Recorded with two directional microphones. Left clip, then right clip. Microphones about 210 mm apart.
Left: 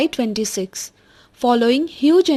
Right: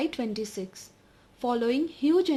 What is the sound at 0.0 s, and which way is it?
A woman's voice, 30° left (ahead or behind).